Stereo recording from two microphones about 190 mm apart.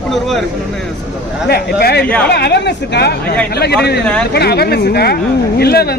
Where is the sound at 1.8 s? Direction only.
55° left (ahead or behind).